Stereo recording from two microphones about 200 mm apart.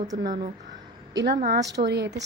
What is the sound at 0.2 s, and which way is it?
Speech, 45° right (ahead or behind).